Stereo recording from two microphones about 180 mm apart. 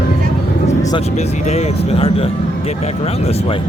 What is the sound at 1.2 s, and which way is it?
Speech, 40° left (ahead or behind).